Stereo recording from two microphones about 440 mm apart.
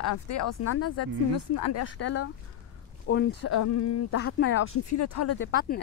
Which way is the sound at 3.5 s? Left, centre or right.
Left.